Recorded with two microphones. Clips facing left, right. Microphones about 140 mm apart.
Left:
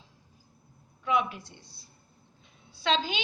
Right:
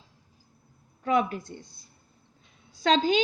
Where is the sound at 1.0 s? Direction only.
45° right (ahead or behind).